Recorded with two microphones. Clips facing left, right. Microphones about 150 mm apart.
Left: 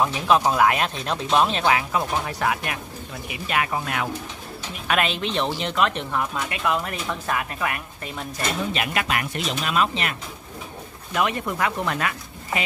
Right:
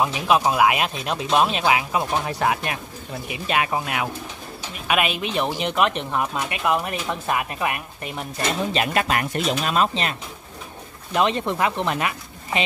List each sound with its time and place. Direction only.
0.0 s speech: 10° right (ahead or behind)
8.7 s speech: 35° right (ahead or behind)
11.1 s speech: 25° right (ahead or behind)